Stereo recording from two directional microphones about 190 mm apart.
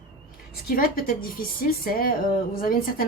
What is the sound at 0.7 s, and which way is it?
A woman's voice, 50° left (ahead or behind).